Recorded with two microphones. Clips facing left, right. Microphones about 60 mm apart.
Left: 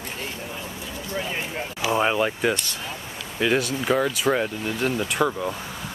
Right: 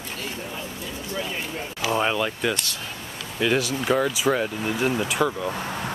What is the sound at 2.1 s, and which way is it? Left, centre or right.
Speech, left.